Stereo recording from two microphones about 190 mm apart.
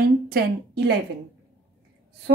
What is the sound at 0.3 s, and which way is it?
Speech, 55° right (ahead or behind).